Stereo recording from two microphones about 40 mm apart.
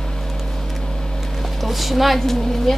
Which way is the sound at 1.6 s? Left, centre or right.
Centre.